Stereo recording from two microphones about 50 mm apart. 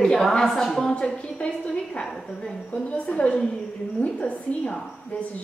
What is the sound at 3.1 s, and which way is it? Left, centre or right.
A woman's voice, left.